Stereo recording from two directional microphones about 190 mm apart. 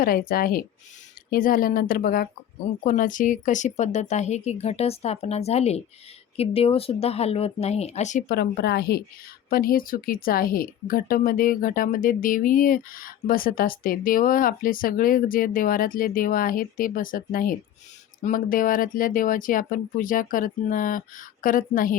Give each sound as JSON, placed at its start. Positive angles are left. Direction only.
{"t": 0.0, "sound": "a woman's voice", "side_deg": 50}
{"t": 8.4, "sound": "a woman's voice", "side_deg": 60}